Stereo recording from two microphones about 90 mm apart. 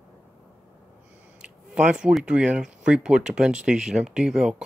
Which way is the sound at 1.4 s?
10° right (ahead or behind).